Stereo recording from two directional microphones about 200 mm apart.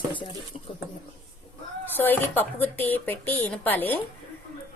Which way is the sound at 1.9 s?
10° left (ahead or behind).